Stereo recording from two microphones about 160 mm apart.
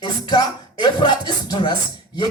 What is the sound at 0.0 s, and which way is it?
Music, 25° left (ahead or behind).